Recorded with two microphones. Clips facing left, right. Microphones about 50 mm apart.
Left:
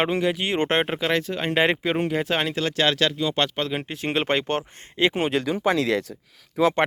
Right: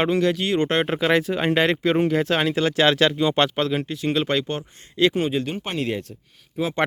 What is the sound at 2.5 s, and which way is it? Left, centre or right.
Speech, centre.